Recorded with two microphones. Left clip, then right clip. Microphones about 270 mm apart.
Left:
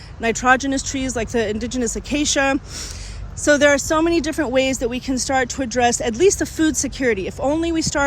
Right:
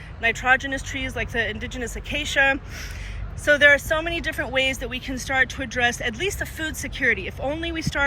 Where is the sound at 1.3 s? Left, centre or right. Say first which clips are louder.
Left 4 dB; left.